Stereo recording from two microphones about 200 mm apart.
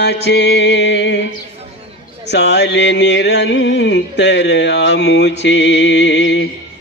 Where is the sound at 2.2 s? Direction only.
60° left (ahead or behind).